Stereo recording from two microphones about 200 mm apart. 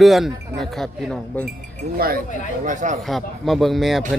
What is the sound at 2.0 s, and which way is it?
Speech, 45° right (ahead or behind).